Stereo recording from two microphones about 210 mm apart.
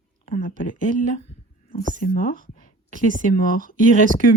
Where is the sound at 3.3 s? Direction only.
40° left (ahead or behind).